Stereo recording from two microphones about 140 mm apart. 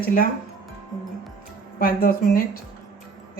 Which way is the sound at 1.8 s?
90° left.